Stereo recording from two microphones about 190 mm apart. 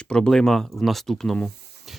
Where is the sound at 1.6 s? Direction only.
60° right (ahead or behind).